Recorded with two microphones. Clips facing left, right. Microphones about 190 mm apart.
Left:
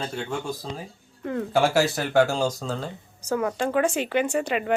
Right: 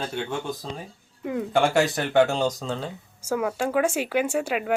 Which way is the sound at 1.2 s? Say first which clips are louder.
Even; 10° right (ahead or behind).